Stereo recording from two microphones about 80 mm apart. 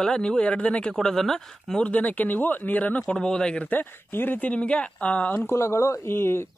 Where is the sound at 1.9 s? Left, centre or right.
Centre.